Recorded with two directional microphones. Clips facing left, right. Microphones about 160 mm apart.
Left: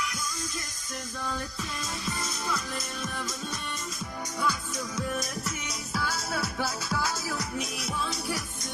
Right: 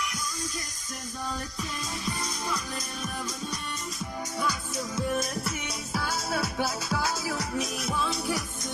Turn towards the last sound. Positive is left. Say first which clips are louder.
# right 1 dB
turn(degrees=-25)  # may be behind; listen again after turning